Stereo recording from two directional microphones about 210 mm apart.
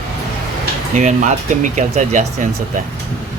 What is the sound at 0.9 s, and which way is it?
Speech, 35° right (ahead or behind).